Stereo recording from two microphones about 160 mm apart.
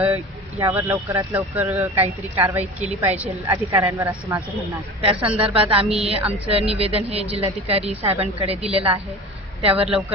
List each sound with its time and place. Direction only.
0.6 s speech: 20° right (ahead or behind)
5.0 s a woman's voice: 35° right (ahead or behind)
9.8 s speech: 5° right (ahead or behind)